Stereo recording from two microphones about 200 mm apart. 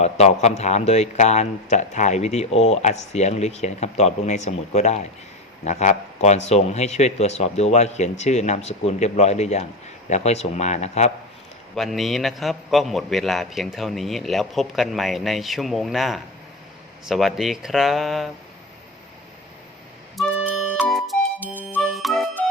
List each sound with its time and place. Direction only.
0.0 s a man's voice: 35° left (ahead or behind)
11.7 s a man's voice: centre (ahead or behind)
20.1 s music: 5° left (ahead or behind)